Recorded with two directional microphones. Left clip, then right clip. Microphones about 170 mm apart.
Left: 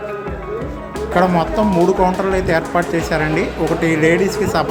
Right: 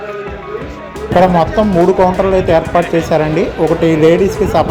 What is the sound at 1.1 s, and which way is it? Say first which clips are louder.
Speech: right 6 dB; 20° right (ahead or behind).